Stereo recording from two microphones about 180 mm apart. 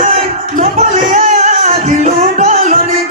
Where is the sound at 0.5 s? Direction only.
45° right (ahead or behind).